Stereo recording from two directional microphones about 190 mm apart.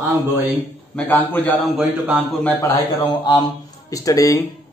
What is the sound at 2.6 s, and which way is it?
Speech, 20° left (ahead or behind).